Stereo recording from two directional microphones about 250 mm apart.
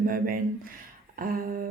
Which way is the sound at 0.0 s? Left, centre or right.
Right.